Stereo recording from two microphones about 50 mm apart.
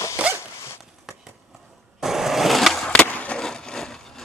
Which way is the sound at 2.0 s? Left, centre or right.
Centre.